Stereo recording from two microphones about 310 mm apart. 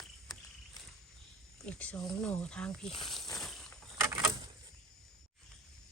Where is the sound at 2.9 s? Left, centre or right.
Centre.